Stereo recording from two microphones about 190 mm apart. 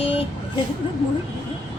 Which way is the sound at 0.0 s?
30° left (ahead or behind).